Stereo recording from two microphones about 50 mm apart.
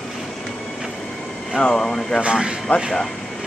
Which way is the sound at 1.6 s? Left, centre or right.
Centre.